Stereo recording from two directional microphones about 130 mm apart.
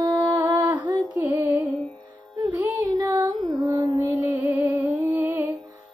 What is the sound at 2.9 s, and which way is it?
Music, 30° right (ahead or behind).